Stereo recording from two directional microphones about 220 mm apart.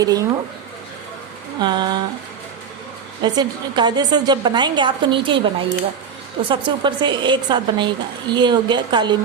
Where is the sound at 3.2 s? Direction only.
20° right (ahead or behind).